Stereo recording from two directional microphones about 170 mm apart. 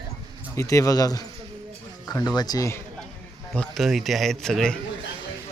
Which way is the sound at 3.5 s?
5° left (ahead or behind).